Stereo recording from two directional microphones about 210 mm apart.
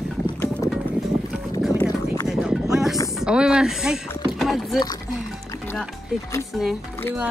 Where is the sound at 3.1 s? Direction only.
5° right (ahead or behind).